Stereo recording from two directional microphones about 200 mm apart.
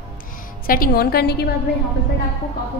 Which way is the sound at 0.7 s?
45° left (ahead or behind).